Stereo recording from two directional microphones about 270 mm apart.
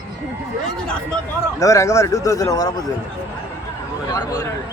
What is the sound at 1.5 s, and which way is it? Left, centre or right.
Speech, centre.